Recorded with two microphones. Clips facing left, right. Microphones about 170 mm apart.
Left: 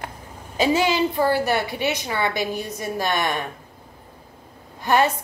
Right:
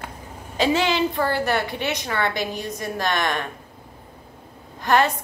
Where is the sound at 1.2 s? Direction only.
15° left (ahead or behind).